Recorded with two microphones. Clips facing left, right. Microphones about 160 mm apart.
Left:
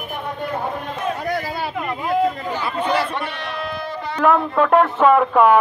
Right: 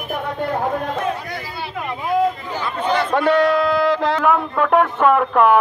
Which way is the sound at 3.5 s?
90° right.